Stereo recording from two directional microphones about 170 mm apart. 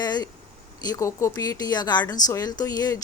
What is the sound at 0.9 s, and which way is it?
A woman's voice, 20° left (ahead or behind).